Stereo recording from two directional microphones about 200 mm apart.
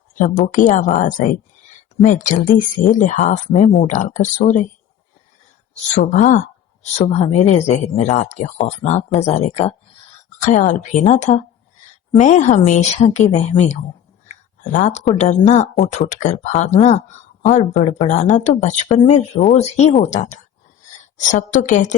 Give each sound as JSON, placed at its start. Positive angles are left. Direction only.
{"t": 0.2, "sound": "speech", "side_deg": 40}
{"t": 5.9, "sound": "speech", "side_deg": 40}